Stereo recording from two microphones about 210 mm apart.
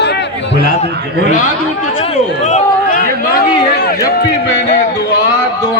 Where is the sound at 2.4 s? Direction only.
35° left (ahead or behind).